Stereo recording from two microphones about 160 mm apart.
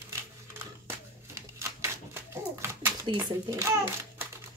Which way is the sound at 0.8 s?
15° right (ahead or behind).